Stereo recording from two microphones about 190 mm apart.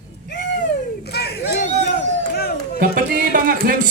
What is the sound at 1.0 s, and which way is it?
Crowd, 60° left (ahead or behind).